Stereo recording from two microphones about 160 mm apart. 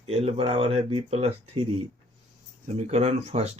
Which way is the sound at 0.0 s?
35° right (ahead or behind).